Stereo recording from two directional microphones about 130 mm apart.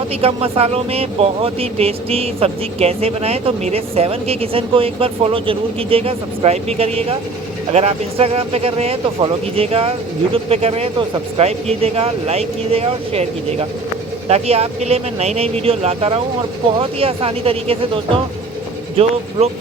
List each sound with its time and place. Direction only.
0.2 s speech: 45° right (ahead or behind)